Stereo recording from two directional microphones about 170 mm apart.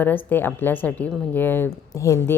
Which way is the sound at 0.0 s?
10° left (ahead or behind).